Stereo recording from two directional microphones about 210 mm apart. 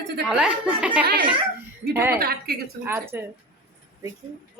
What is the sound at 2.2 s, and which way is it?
Speech, 45° right (ahead or behind).